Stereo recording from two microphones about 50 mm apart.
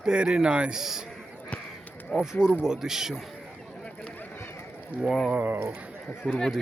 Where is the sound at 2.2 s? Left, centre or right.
Centre.